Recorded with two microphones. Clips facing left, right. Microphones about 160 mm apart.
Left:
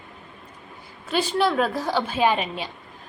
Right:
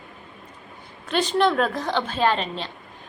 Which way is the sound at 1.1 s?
5° left (ahead or behind).